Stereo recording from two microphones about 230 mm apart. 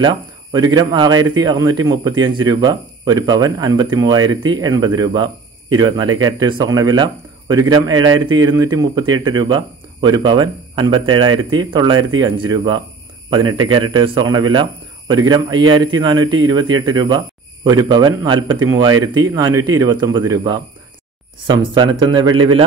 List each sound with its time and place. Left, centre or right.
0.0 s speech: centre